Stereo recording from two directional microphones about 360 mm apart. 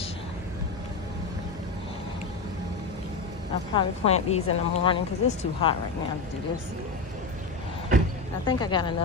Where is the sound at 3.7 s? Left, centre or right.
Centre.